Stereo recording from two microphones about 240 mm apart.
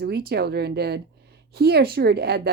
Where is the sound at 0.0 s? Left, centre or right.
Right.